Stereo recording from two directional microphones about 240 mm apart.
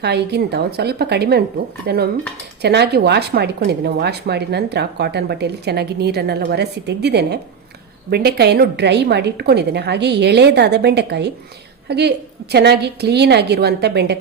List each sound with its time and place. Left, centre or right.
0.0 s a woman's voice: right